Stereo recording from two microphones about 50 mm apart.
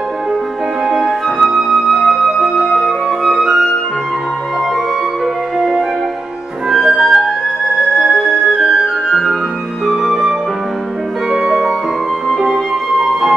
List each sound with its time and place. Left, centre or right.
0.8 s music: centre
1.5 s flute: centre
5.6 s music: centre
7.0 s music: centre
7.7 s flute: centre
9.8 s music: centre
11.4 s music: centre